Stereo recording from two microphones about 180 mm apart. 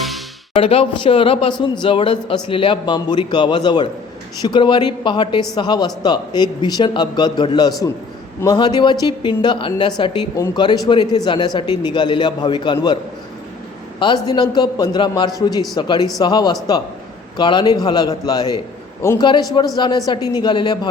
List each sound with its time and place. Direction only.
0.5 s speech: 30° left (ahead or behind)
14.3 s a man's voice: 25° left (ahead or behind)